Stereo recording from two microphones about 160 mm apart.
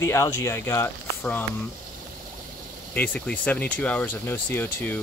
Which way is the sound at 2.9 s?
10° left (ahead or behind).